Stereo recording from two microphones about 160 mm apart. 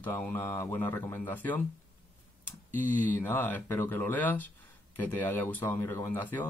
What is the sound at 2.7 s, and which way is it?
Speech, 10° left (ahead or behind).